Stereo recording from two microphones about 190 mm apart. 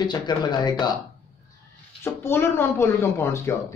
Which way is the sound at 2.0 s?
10° left (ahead or behind).